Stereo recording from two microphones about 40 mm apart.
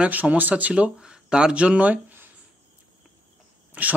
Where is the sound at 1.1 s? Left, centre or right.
Centre.